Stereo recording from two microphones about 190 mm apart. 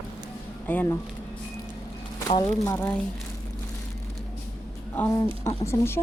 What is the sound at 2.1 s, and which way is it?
Speech, 20° left (ahead or behind).